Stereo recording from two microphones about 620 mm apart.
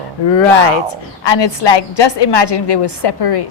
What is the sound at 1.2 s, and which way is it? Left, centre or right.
A woman's voice, left.